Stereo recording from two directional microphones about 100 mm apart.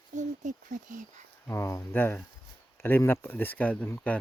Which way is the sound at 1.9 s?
20° left (ahead or behind).